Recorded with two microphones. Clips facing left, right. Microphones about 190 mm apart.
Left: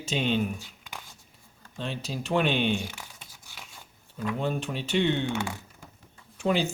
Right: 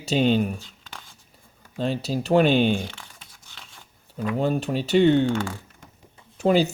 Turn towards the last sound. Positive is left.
turn(degrees=-40)  # may be behind; listen again after turning